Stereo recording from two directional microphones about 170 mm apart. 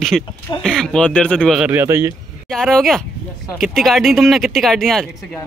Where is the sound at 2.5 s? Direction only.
5° left (ahead or behind).